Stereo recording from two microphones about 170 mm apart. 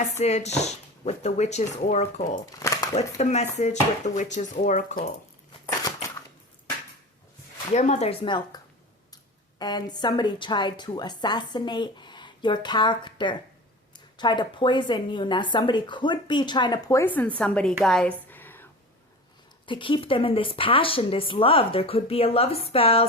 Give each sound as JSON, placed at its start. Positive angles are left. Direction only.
{"t": 0.2, "sound": "a woman's voice", "side_deg": 40}
{"t": 2.6, "sound": "a sound", "side_deg": 20}
{"t": 2.9, "sound": "speech", "side_deg": 40}
{"t": 7.7, "sound": "a woman's voice", "side_deg": 45}
{"t": 17.8, "sound": "a sound", "side_deg": 5}
{"t": 19.6, "sound": "a woman's voice", "side_deg": 30}